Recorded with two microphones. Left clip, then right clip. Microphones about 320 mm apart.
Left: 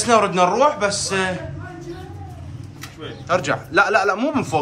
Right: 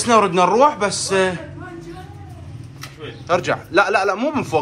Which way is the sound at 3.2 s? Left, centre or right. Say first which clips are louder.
Right 1 dB; centre.